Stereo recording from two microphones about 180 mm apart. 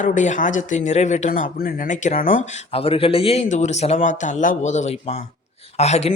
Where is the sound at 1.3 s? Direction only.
55° left (ahead or behind).